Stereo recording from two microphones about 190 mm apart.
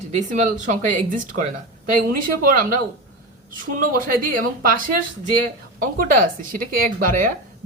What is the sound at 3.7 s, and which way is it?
A woman's voice, 45° right (ahead or behind).